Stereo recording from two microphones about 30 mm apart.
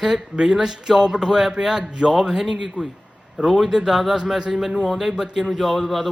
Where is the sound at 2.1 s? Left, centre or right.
Centre.